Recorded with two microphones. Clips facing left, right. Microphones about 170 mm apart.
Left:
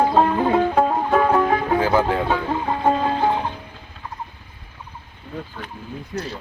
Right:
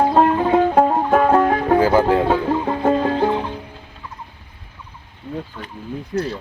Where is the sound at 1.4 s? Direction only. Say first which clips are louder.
Right 3 dB; 50° right (ahead or behind).